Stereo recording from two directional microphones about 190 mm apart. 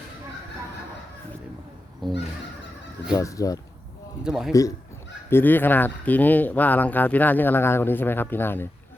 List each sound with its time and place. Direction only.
2.0 s a man's voice: centre (ahead or behind)
3.2 s speech: 15° left (ahead or behind)
4.2 s a man's voice: 5° right (ahead or behind)
5.3 s speech: 10° left (ahead or behind)